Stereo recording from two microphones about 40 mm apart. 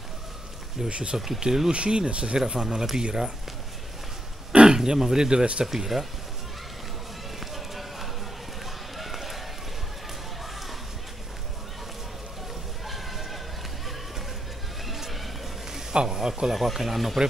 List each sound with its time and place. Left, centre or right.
0.8 s speech: right
1.1 s speech: centre
1.7 s speech: right
2.3 s speech: centre
4.5 s speech: centre
5.7 s speech: centre
7.3 s music: centre
8.9 s run: centre
12.8 s a sound: centre
14.9 s a sound: centre
15.9 s speech: right
16.5 s speech: centre